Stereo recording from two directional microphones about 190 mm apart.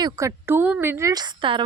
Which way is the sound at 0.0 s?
15° right (ahead or behind).